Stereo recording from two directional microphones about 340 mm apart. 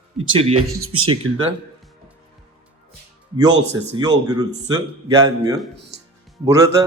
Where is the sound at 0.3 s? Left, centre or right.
Centre.